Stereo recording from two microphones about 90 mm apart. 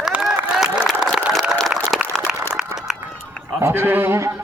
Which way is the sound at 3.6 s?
25° right (ahead or behind).